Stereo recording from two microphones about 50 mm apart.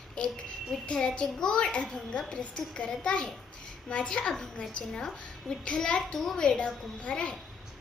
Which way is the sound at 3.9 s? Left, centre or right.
Centre.